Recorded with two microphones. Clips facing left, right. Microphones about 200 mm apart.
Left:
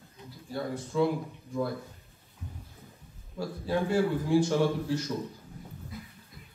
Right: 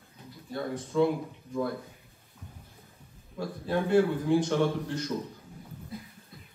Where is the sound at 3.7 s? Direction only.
5° left (ahead or behind).